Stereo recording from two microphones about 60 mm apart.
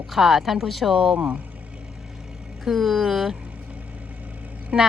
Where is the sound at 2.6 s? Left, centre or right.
Centre.